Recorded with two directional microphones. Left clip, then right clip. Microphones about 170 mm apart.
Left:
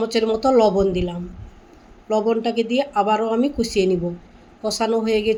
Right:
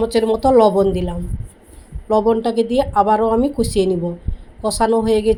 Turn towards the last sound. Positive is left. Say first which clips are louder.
# right 4 dB
turn(degrees=-20)  # may be behind; listen again after turning